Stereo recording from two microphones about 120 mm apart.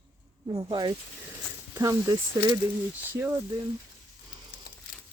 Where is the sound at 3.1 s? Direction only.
20° right (ahead or behind).